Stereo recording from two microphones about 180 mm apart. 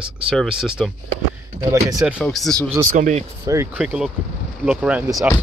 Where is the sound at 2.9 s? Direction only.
50° right (ahead or behind).